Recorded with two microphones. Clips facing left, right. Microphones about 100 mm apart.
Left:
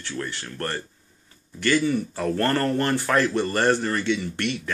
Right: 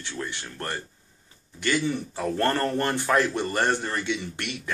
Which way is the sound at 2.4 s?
15° right (ahead or behind).